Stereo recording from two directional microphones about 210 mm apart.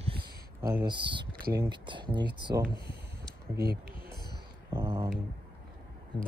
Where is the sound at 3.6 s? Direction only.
50° right (ahead or behind).